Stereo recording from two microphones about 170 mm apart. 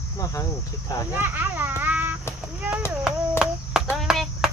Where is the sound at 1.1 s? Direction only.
10° right (ahead or behind).